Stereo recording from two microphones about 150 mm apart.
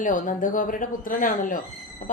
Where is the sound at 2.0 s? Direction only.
60° left (ahead or behind).